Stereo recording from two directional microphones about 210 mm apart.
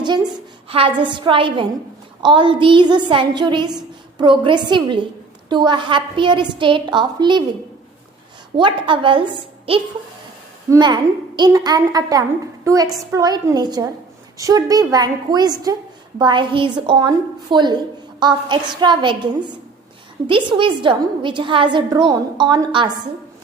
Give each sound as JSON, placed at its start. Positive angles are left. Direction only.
{"t": 0.0, "sound": "a woman's voice", "side_deg": -20}
{"t": 8.5, "sound": "a woman's voice", "side_deg": -25}